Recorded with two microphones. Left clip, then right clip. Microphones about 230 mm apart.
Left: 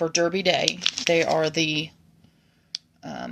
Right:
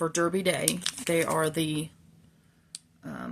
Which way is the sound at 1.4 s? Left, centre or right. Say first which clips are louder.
Left 5 dB; centre.